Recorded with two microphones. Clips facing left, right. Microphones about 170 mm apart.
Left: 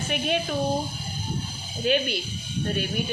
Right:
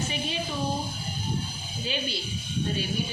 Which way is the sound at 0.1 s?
60° left (ahead or behind).